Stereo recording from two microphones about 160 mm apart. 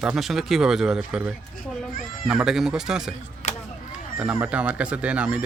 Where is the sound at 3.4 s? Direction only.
50° left (ahead or behind).